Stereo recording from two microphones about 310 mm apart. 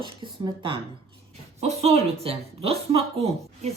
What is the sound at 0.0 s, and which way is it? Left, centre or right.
A woman's voice, centre.